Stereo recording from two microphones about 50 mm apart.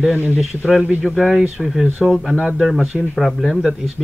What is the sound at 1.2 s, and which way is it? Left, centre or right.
A man's voice, centre.